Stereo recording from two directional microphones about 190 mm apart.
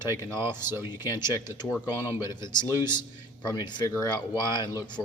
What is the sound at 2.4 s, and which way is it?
Speech, 20° left (ahead or behind).